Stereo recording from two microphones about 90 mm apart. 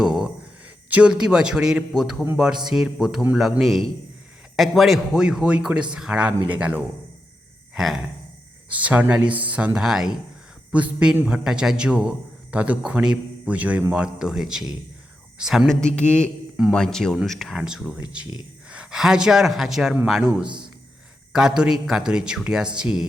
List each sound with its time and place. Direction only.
0.0 s a sound: 5° right (ahead or behind)
0.9 s a man's voice: 15° right (ahead or behind)
6.5 s speech: 20° right (ahead or behind)
8.7 s a man's voice: 15° right (ahead or behind)